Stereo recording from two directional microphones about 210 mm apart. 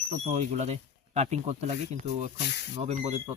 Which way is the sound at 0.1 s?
30° right (ahead or behind).